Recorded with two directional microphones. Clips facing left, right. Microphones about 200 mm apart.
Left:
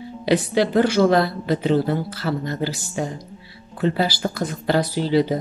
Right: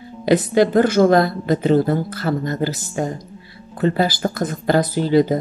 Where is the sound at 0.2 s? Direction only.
50° right (ahead or behind).